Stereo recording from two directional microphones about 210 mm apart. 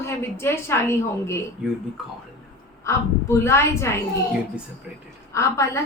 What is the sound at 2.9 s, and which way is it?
A woman's voice, 15° left (ahead or behind).